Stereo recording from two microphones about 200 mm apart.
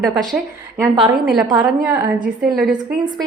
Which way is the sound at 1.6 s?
10° right (ahead or behind).